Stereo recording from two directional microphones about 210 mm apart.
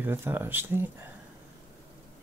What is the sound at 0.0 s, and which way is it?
Speech, 10° right (ahead or behind).